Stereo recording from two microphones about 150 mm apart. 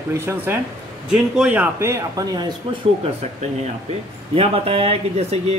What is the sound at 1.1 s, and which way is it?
Speech, 5° right (ahead or behind).